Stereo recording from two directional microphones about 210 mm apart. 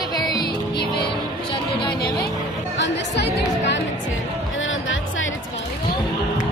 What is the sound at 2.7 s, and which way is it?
Speech, 55° left (ahead or behind).